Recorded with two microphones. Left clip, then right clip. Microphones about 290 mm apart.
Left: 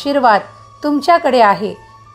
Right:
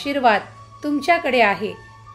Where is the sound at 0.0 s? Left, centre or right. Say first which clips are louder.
Left 6 dB; centre.